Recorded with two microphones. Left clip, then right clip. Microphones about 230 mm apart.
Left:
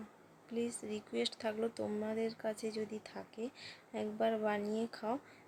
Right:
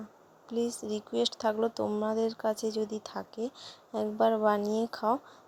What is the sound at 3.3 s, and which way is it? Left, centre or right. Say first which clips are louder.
Speech: right 8 dB; right.